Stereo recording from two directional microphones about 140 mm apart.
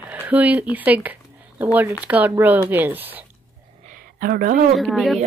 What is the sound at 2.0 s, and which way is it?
Speech, 10° right (ahead or behind).